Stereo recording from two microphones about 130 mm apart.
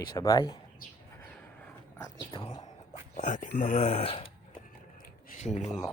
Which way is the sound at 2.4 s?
40° left (ahead or behind).